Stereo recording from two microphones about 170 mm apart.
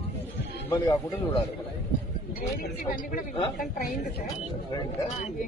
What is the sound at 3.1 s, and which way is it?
Speech, 55° left (ahead or behind).